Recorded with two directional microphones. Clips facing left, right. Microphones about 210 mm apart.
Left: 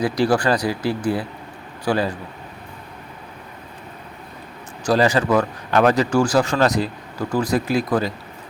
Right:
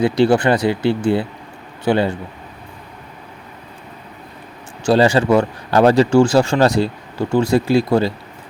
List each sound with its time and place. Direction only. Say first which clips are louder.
0.0 s speech: right 5 dB; 25° right (ahead or behind)
4.9 s speech: right 4 dB; 30° right (ahead or behind)